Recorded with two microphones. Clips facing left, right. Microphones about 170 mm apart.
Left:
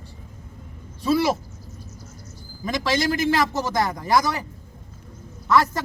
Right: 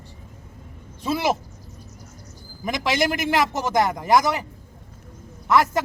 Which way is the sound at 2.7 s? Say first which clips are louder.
Even; 20° right (ahead or behind).